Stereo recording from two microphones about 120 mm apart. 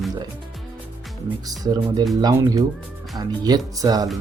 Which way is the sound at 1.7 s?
35° right (ahead or behind).